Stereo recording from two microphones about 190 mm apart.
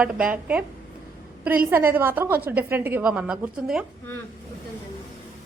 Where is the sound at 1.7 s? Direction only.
10° right (ahead or behind).